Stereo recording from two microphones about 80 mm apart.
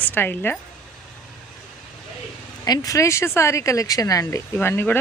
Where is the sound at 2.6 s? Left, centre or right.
Left.